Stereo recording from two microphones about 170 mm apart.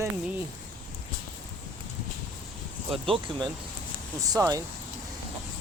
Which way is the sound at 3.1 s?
30° right (ahead or behind).